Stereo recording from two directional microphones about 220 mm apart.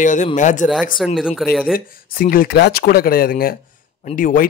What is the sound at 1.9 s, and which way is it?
Speech, 40° left (ahead or behind).